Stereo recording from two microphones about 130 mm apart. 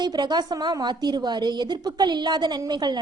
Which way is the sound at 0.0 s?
35° right (ahead or behind).